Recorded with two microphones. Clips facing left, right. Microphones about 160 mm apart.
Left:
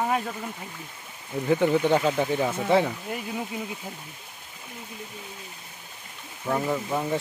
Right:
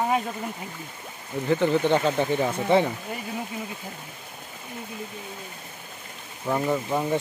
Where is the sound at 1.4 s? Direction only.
10° left (ahead or behind).